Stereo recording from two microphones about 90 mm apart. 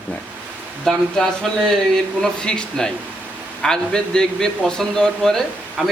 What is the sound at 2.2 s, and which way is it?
A man's voice, 10° left (ahead or behind).